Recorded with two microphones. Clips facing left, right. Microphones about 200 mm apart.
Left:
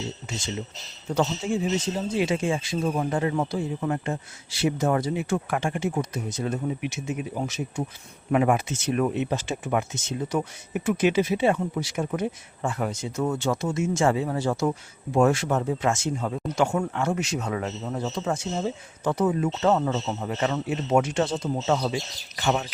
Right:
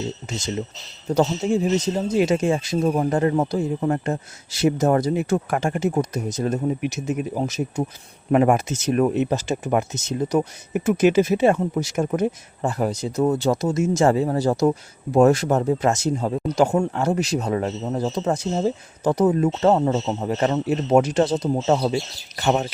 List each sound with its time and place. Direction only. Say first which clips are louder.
1.1 s speech: right 5 dB; 40° right (ahead or behind)